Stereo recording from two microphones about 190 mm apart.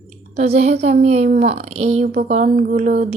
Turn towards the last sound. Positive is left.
turn(degrees=-40)  # may be behind; listen again after turning